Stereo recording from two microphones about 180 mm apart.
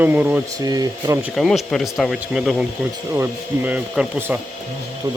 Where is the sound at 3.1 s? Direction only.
10° right (ahead or behind).